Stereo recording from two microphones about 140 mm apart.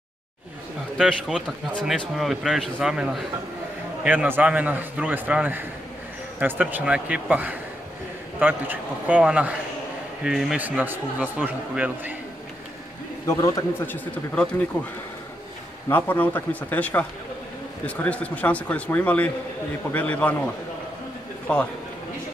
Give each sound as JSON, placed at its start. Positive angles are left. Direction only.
{"t": 0.9, "sound": "a man's voice", "side_deg": -5}
{"t": 13.3, "sound": "a man's voice", "side_deg": 25}
{"t": 13.9, "sound": "speech", "side_deg": 5}
{"t": 15.9, "sound": "speech", "side_deg": 15}
{"t": 21.5, "sound": "speech", "side_deg": 10}